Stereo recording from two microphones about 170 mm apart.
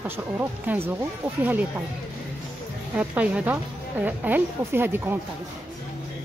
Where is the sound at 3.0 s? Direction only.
5° right (ahead or behind).